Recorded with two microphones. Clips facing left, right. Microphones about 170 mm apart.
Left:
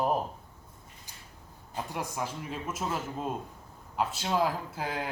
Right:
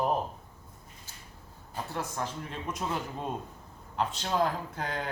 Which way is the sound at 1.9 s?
10° left (ahead or behind).